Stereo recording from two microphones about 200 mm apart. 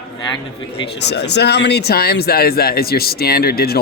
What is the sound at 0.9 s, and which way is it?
Speech, 60° left (ahead or behind).